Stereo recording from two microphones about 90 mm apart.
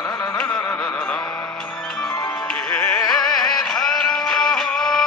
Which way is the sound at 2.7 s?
15° left (ahead or behind).